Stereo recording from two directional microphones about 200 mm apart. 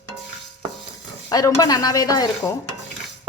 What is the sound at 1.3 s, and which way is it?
Speech, 20° left (ahead or behind).